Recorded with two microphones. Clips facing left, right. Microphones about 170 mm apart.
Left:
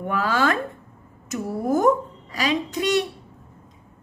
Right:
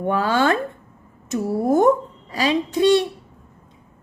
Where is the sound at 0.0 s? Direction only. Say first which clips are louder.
Right 3 dB; 30° right (ahead or behind).